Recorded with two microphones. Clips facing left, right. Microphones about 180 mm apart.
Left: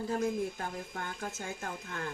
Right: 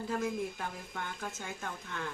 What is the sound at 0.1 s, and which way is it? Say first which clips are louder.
Dishes: left 2 dB; 40° left (ahead or behind).